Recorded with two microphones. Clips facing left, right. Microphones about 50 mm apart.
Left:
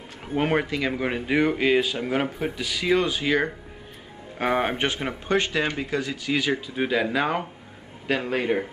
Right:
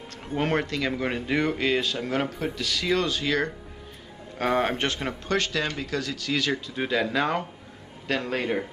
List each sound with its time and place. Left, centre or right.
0.2 s speech: centre